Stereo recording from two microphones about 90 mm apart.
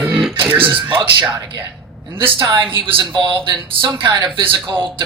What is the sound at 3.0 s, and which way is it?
Speech, 55° right (ahead or behind).